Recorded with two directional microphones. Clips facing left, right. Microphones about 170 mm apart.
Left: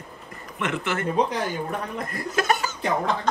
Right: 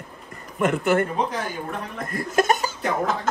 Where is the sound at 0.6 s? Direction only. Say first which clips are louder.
Right 7 dB; 45° right (ahead or behind).